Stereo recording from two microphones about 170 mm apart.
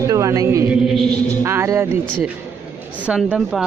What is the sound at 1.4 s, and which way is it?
Speech, 15° right (ahead or behind).